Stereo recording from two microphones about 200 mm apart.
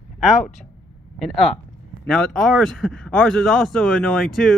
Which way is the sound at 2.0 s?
Centre (ahead or behind).